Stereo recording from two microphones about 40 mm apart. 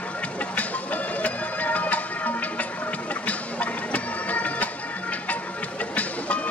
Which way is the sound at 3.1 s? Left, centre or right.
Left.